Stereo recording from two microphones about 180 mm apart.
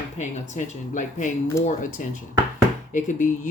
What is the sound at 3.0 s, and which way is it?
Speech, 45° left (ahead or behind).